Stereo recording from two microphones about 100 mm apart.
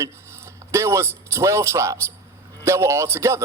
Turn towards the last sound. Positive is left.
turn(degrees=-25)  # may be behind; listen again after turning